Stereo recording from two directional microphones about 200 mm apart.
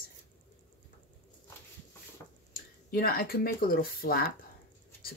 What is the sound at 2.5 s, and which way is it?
Speech, 50° left (ahead or behind).